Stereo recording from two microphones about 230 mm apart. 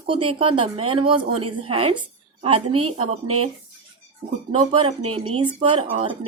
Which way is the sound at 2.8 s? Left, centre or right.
Right.